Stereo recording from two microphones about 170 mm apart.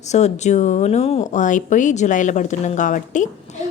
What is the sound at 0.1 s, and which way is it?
Speech, 45° left (ahead or behind).